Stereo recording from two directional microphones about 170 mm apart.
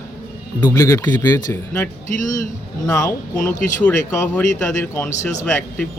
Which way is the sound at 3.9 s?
10° left (ahead or behind).